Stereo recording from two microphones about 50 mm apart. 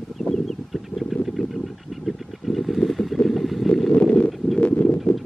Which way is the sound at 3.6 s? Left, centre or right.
Centre.